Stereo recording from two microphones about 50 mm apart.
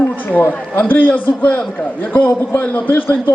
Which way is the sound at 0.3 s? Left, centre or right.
Left.